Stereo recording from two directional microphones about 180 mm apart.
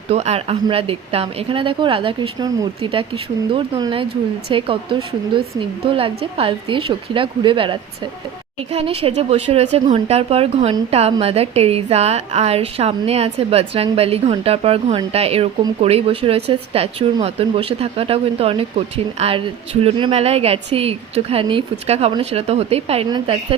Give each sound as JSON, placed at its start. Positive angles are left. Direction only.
{"t": 0.1, "sound": "a woman's voice", "side_deg": -35}